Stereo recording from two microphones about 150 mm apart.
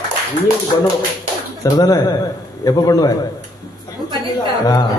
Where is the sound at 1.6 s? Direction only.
25° left (ahead or behind).